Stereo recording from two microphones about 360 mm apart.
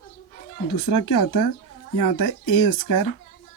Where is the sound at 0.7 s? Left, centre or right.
Left.